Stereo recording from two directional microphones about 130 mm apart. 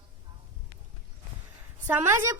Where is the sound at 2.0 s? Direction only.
20° right (ahead or behind).